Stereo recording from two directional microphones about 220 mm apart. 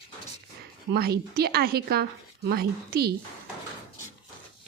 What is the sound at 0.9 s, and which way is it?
A woman's voice, 45° right (ahead or behind).